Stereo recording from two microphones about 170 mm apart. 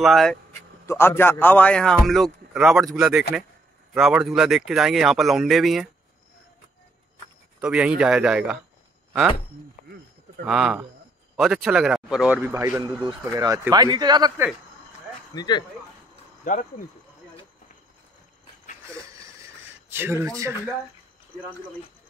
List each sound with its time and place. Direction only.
0.0 s a man's voice: centre (ahead or behind)
0.8 s a man's voice: 15° left (ahead or behind)
7.6 s a man's voice: 5° right (ahead or behind)
10.4 s a man's voice: centre (ahead or behind)
12.4 s a man's voice: 15° right (ahead or behind)
15.3 s speech: 25° left (ahead or behind)
16.4 s speech: 50° left (ahead or behind)
19.9 s speech: 15° right (ahead or behind)